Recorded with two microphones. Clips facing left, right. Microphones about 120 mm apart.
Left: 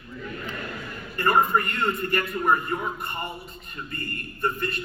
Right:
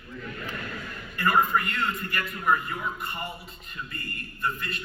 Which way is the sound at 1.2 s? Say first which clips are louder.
Left 2 dB; 40° left (ahead or behind).